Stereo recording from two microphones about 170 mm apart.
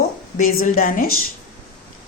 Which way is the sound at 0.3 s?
50° left (ahead or behind).